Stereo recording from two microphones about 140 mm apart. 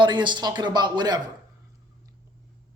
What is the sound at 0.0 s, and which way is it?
A man's voice, 35° right (ahead or behind).